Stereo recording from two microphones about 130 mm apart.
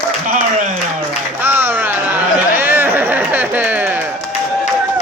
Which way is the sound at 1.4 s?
15° right (ahead or behind).